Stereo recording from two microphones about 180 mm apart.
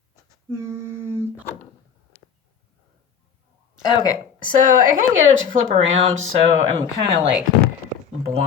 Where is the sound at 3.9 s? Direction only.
20° left (ahead or behind).